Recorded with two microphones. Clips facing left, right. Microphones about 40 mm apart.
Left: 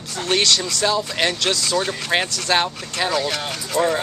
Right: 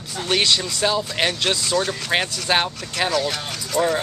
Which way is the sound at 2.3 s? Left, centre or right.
Centre.